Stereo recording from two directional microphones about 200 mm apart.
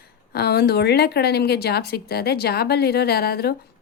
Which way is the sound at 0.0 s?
55° left (ahead or behind).